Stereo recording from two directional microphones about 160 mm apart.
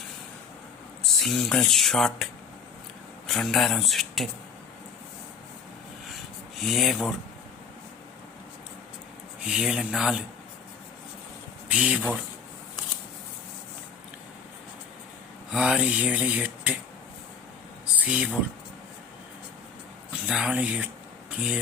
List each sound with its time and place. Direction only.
1.2 s speech: 5° left (ahead or behind)
6.1 s a sound: centre (ahead or behind)
9.4 s speech: 5° right (ahead or behind)
11.7 s speech: 10° right (ahead or behind)
15.5 s speech: 5° right (ahead or behind)
17.9 s a sound: 10° right (ahead or behind)
20.2 s speech: 5° right (ahead or behind)